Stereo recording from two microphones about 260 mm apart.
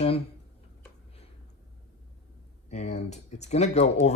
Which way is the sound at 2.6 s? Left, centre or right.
Left.